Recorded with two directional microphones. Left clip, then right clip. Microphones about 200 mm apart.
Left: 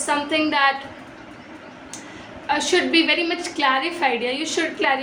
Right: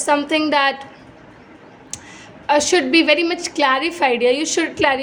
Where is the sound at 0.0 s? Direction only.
55° right (ahead or behind).